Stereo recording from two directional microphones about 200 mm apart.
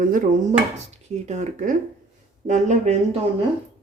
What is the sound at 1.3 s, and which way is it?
Speech, 40° right (ahead or behind).